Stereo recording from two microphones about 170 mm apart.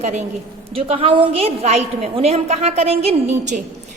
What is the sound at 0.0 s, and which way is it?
Speech, 45° right (ahead or behind).